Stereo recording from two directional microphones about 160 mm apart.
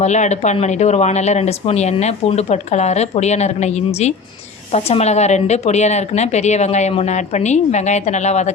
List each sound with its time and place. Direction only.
0.0 s speech: 45° left (ahead or behind)